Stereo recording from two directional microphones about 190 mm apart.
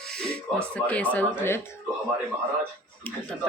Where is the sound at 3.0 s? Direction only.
5° left (ahead or behind).